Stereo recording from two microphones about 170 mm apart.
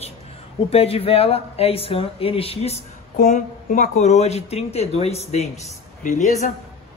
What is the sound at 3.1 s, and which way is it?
A man's voice, 50° left (ahead or behind).